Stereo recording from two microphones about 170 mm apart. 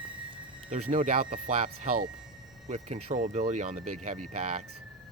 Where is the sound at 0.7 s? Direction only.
45° right (ahead or behind).